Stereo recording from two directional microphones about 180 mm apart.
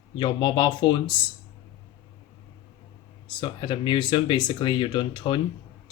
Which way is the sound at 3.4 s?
25° left (ahead or behind).